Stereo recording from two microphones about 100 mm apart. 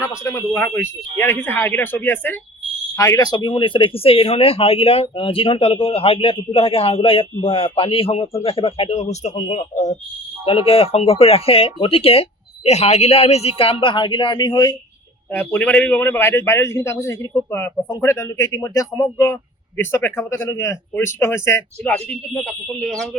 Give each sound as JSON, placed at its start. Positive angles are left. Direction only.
{"t": 0.5, "sound": "a man's voice", "side_deg": 15}
{"t": 2.9, "sound": "speech", "side_deg": 35}
{"t": 10.4, "sound": "speech", "side_deg": 70}
{"t": 13.6, "sound": "speech", "side_deg": 65}
{"t": 15.3, "sound": "a man's voice", "side_deg": 15}
{"t": 21.8, "sound": "speech", "side_deg": 10}